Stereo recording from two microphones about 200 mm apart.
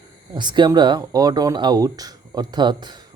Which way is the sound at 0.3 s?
20° right (ahead or behind).